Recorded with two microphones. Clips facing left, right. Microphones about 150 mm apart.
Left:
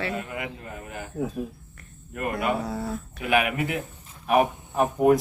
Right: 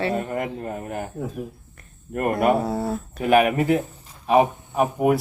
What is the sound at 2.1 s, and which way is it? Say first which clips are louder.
Speech: right 7 dB; 45° right (ahead or behind).